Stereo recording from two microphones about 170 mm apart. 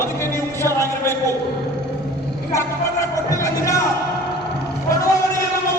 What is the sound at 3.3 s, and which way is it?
Music, 20° left (ahead or behind).